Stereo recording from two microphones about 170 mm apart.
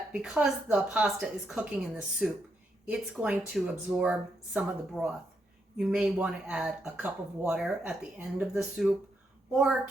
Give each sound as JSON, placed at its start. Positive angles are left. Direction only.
{"t": 0.1, "sound": "speech", "side_deg": -5}